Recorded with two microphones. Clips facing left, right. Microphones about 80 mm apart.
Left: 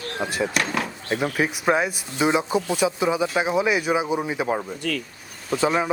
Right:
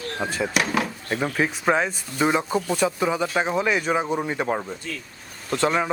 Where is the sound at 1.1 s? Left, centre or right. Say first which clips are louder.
Left 1 dB; centre.